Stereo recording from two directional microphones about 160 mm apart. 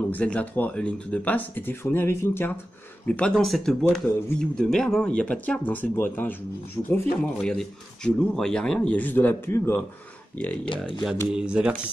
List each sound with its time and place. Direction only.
0.1 s speech: 10° left (ahead or behind)
7.3 s speech: 5° left (ahead or behind)
11.3 s speech: 5° right (ahead or behind)